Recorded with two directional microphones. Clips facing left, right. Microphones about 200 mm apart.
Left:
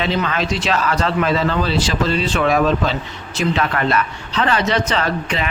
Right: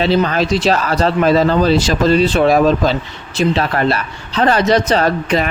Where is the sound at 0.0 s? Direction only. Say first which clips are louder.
Right 6 dB; 35° right (ahead or behind).